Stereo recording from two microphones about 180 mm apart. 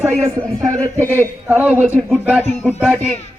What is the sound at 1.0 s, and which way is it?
Speech, 10° left (ahead or behind).